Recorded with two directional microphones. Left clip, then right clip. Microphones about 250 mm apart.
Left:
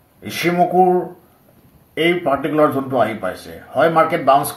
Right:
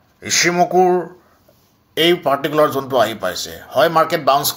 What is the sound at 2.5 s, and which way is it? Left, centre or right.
Speech, centre.